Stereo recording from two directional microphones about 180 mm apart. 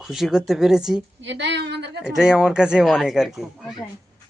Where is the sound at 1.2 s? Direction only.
75° right (ahead or behind).